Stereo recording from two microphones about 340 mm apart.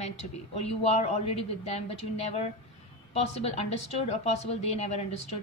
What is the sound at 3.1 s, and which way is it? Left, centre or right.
A woman's voice, centre.